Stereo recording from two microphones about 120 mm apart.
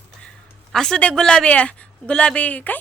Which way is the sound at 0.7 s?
5° left (ahead or behind).